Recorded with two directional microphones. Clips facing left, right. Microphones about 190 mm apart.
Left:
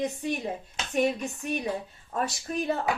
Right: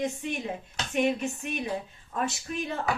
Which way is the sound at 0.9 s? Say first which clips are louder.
Even; 40° left (ahead or behind).